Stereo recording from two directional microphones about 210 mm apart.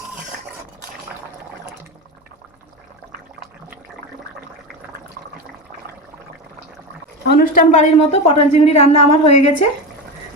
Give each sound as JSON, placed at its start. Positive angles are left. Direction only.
{"t": 7.3, "sound": "a woman's voice", "side_deg": 45}